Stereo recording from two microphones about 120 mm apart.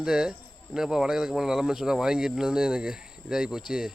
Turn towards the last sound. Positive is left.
turn(degrees=-5)  # may be behind; listen again after turning